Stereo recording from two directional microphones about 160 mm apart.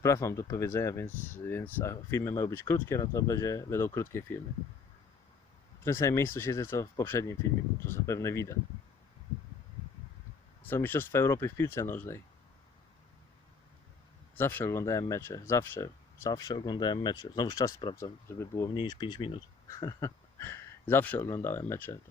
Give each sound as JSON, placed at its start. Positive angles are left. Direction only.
{"t": 0.0, "sound": "speech", "side_deg": 15}
{"t": 5.8, "sound": "speech", "side_deg": 15}
{"t": 10.6, "sound": "speech", "side_deg": 10}
{"t": 14.3, "sound": "speech", "side_deg": 15}
{"t": 18.7, "sound": "speech", "side_deg": 30}
{"t": 19.6, "sound": "speech", "side_deg": 20}